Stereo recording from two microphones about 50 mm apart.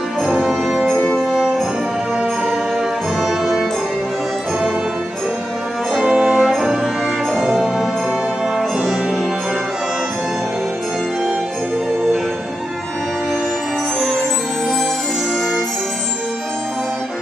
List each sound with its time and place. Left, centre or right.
0.3 s music: centre
3.2 s music: centre
5.9 s brass instrument: centre
6.5 s music: centre